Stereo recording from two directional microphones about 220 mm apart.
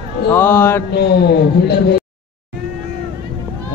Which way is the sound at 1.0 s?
45° left (ahead or behind).